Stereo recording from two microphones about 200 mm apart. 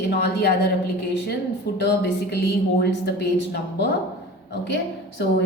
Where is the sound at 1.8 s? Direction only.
55° left (ahead or behind).